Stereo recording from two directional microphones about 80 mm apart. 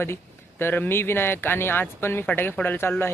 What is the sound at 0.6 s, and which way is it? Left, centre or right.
Speech, left.